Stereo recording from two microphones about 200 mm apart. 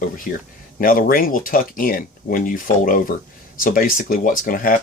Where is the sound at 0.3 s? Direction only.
40° left (ahead or behind).